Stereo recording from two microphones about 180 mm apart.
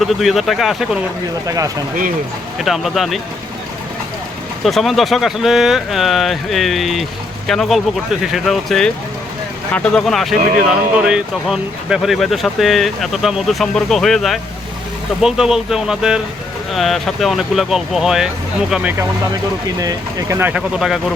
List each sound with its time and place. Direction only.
0.0 s speech: centre (ahead or behind)
1.5 s speech: 20° right (ahead or behind)
2.6 s speech: centre (ahead or behind)
4.6 s speech: centre (ahead or behind)
19.8 s speech: 20° right (ahead or behind)
20.5 s speech: 5° right (ahead or behind)